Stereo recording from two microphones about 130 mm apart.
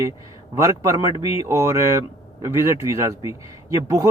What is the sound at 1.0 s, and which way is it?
Speech, 40° left (ahead or behind).